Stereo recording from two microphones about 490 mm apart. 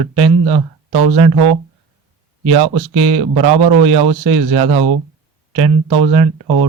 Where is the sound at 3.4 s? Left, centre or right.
Right.